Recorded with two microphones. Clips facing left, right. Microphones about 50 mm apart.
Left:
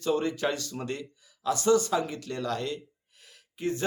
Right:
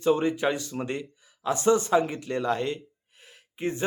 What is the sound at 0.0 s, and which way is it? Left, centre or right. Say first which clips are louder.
Speech: right 4 dB; right.